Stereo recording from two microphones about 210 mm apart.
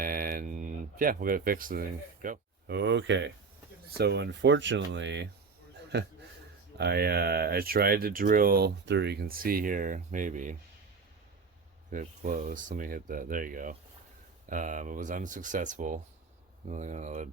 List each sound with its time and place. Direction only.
0.0 s speech: 40° right (ahead or behind)
11.9 s speech: 40° right (ahead or behind)